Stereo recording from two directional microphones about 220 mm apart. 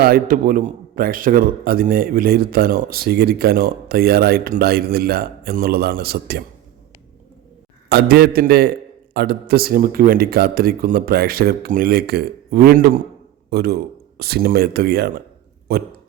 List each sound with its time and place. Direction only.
0.0 s a man's voice: 40° right (ahead or behind)
7.9 s a man's voice: 45° right (ahead or behind)